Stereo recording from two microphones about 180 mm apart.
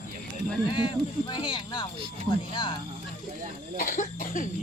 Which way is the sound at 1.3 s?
25° left (ahead or behind).